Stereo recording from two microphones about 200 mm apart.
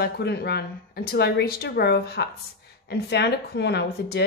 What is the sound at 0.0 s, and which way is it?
Speech, 55° left (ahead or behind).